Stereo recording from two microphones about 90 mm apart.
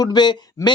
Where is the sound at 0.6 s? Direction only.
35° left (ahead or behind).